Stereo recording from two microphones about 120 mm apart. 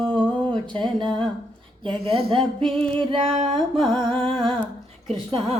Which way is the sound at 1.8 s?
45° right (ahead or behind).